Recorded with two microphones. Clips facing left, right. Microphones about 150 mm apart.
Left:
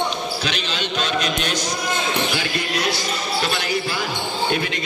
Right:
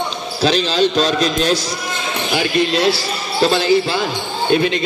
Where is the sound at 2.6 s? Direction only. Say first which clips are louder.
Right 8 dB; 25° right (ahead or behind).